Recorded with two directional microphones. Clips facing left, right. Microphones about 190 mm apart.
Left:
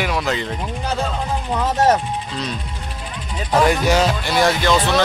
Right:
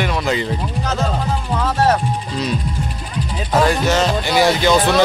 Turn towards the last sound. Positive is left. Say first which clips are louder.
# right 3 dB
turn(degrees=-15)  # may be behind; listen again after turning